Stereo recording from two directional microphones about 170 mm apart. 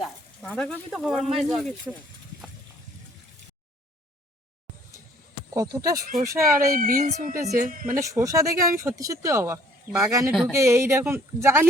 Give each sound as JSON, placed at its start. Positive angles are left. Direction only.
{"t": 0.4, "sound": "speech", "side_deg": 5}
{"t": 5.5, "sound": "speech", "side_deg": -20}
{"t": 6.1, "sound": "speech", "side_deg": -55}
{"t": 6.3, "sound": "speech", "side_deg": -15}
{"t": 6.6, "sound": "a woman's voice", "side_deg": -55}
{"t": 7.9, "sound": "speech", "side_deg": -20}